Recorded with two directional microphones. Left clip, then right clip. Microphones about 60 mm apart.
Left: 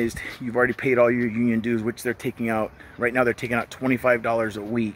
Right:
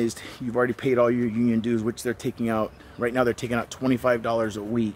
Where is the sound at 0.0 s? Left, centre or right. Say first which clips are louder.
Left 1 dB; centre.